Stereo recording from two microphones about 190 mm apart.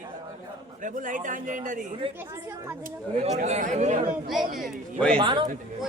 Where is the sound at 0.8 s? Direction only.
40° right (ahead or behind).